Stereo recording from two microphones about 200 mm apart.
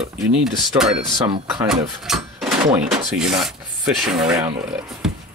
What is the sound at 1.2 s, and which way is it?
Speech, 25° right (ahead or behind).